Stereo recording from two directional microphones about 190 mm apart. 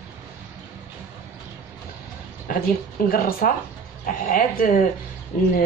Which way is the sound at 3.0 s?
50° left (ahead or behind).